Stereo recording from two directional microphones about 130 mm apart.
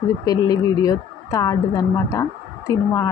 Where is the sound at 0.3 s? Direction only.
30° left (ahead or behind).